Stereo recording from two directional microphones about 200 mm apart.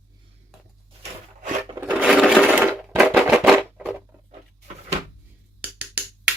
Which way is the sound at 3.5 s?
5° right (ahead or behind).